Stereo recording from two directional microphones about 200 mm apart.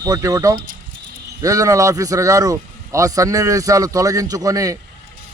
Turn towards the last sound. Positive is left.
turn(degrees=-15)  # may be behind; listen again after turning